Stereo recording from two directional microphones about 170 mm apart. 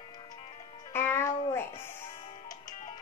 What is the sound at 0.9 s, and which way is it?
Music, 15° left (ahead or behind).